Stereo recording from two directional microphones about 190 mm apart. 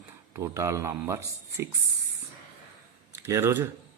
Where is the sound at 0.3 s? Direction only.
15° right (ahead or behind).